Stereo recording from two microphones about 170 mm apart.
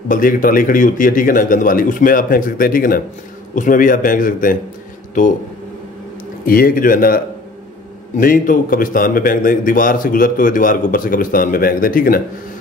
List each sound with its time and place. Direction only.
0.1 s a man's voice: 55° left (ahead or behind)
6.4 s a man's voice: 55° left (ahead or behind)
8.2 s a man's voice: 50° left (ahead or behind)